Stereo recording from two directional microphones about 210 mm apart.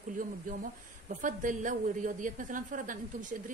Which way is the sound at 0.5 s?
40° right (ahead or behind).